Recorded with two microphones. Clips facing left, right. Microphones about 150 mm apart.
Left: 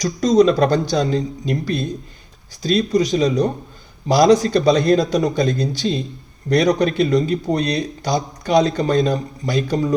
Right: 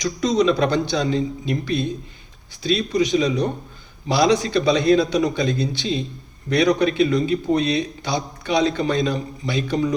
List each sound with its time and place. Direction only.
0.0 s speech: 40° left (ahead or behind)